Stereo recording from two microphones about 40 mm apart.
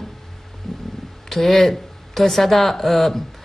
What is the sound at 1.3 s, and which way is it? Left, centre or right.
A man's voice, centre.